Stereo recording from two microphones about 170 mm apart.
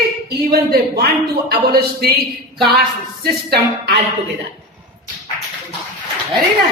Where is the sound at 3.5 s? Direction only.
70° right (ahead or behind).